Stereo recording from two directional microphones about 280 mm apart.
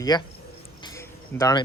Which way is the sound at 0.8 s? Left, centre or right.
Centre.